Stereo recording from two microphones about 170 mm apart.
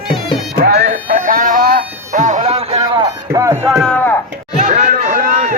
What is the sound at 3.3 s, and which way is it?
Music, 15° right (ahead or behind).